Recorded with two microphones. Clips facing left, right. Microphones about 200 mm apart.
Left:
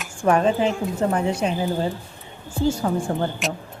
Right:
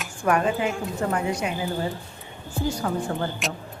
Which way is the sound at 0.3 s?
30° left (ahead or behind).